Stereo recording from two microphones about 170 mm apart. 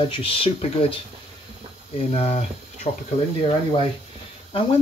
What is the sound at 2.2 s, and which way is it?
Speech, 40° left (ahead or behind).